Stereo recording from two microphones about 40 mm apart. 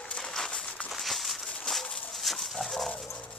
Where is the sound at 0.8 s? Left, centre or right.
Centre.